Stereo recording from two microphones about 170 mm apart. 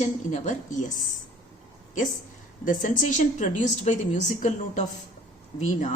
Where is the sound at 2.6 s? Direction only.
50° left (ahead or behind).